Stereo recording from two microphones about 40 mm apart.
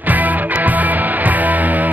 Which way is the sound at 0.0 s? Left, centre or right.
Right.